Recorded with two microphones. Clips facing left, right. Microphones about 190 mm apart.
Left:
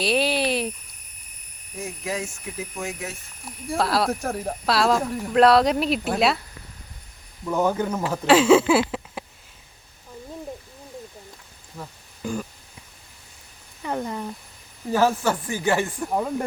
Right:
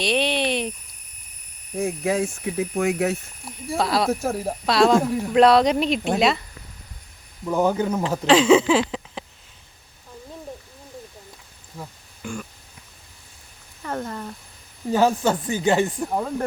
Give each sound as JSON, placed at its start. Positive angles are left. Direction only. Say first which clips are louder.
{"t": 0.0, "sound": "a sound", "louder": "even", "side_deg": 5}
{"t": 1.7, "sound": "speech", "louder": "right 7 dB", "side_deg": -55}
{"t": 3.4, "sound": "speech", "louder": "even", "side_deg": 0}
{"t": 7.4, "sound": "speech", "louder": "right 2 dB", "side_deg": -10}
{"t": 8.3, "sound": "a sound", "louder": "even", "side_deg": 5}
{"t": 12.2, "sound": "a sound", "louder": "left 4 dB", "side_deg": 35}
{"t": 13.8, "sound": "speech", "louder": "left 1 dB", "side_deg": 10}
{"t": 14.9, "sound": "speech", "louder": "right 1 dB", "side_deg": -20}
{"t": 16.0, "sound": "speech", "louder": "even", "side_deg": 0}